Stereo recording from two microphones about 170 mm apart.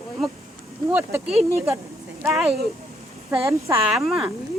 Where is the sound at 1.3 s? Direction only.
35° right (ahead or behind).